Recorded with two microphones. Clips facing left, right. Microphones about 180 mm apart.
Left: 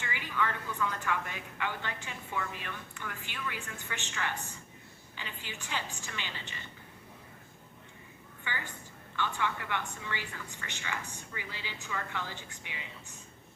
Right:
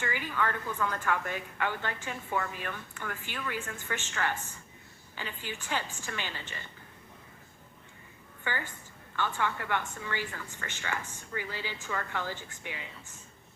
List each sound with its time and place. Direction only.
0.0 s a woman's voice: 45° right (ahead or behind)
8.5 s a woman's voice: 45° right (ahead or behind)